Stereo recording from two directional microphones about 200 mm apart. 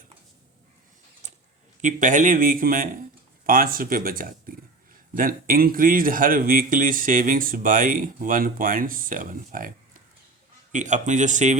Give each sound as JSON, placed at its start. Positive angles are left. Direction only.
{"t": 1.8, "sound": "a man's voice", "side_deg": -40}